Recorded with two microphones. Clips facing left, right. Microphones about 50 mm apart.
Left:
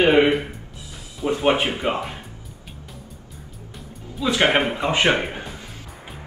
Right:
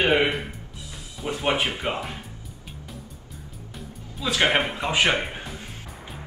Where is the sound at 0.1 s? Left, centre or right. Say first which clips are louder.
Left 5 dB; centre.